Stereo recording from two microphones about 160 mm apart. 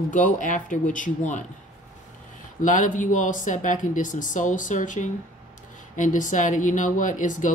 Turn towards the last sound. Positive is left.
turn(degrees=55)  # may be behind; listen again after turning